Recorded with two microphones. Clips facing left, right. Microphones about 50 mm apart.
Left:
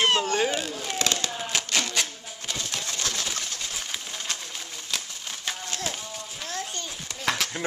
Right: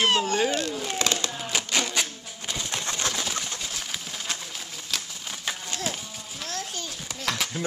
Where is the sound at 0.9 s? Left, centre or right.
Centre.